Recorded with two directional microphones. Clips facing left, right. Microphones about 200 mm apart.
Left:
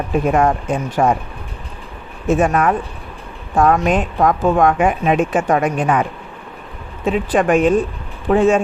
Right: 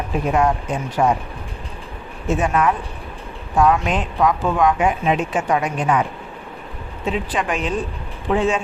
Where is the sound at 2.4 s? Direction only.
50° left (ahead or behind).